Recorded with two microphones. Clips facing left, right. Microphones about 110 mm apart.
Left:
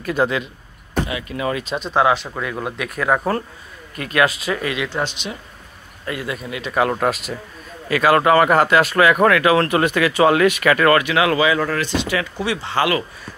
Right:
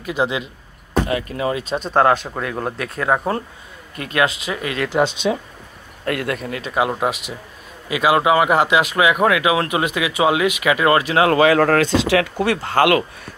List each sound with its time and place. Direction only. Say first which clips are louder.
0.0 s speech: left 2 dB; 15° right (ahead or behind)
1.0 s speech: right 3 dB; 40° right (ahead or behind)
2.0 s speech: right 2 dB; 50° right (ahead or behind)
2.6 s speech: left 1 dB; 30° right (ahead or behind)
4.9 s a man's voice: right 7 dB; 70° right (ahead or behind)
6.6 s speech: left 2 dB; 15° right (ahead or behind)
11.0 s speech: right 2 dB; 35° right (ahead or behind)
11.3 s speech: right 5 dB; 60° right (ahead or behind); by 12.3 s 80° right
12.4 s speech: right 4 dB; 50° right (ahead or behind)